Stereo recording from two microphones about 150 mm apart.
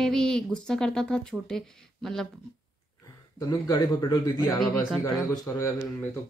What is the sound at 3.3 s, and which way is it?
Speech, 25° left (ahead or behind).